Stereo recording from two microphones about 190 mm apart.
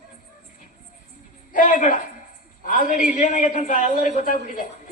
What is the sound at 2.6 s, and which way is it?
A man's voice, 45° left (ahead or behind).